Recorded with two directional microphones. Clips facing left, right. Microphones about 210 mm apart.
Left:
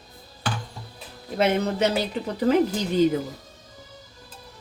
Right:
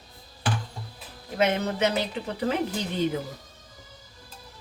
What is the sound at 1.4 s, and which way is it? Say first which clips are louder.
Speech: left 2 dB; 35° left (ahead or behind).